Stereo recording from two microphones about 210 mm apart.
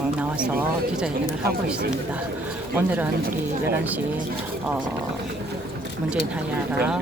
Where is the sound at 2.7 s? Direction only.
10° right (ahead or behind).